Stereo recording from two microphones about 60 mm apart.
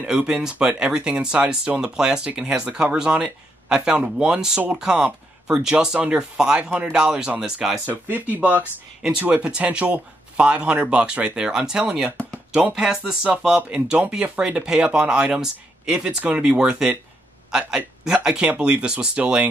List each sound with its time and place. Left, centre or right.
0.0 s speech: centre
7.9 s speech: right